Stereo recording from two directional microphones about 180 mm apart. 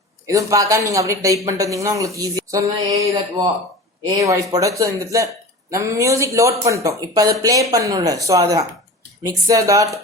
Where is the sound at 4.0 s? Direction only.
20° right (ahead or behind).